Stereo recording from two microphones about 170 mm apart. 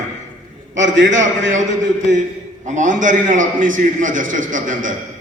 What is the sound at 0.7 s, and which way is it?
Speech, 90° right.